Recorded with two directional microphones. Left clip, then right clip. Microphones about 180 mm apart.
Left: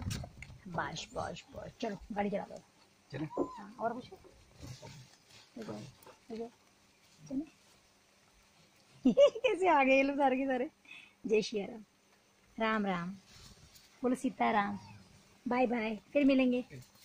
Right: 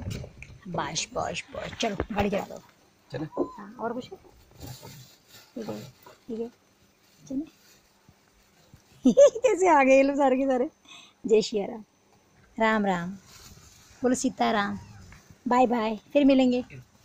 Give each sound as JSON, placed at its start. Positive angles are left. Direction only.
{"t": 0.7, "sound": "a woman's voice", "side_deg": -15}
{"t": 3.6, "sound": "a woman's voice", "side_deg": -15}
{"t": 9.0, "sound": "a woman's voice", "side_deg": -10}